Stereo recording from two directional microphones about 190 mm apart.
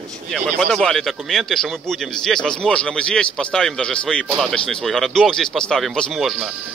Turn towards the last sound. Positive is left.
turn(degrees=0)  # may be behind; listen again after turning